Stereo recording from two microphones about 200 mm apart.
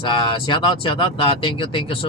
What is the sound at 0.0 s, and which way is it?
Speech, 25° left (ahead or behind).